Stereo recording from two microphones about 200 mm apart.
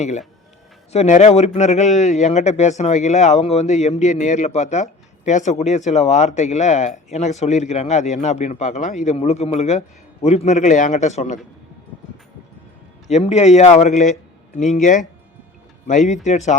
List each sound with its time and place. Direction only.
0.9 s a man's voice: 35° left (ahead or behind)
13.1 s a man's voice: 35° left (ahead or behind)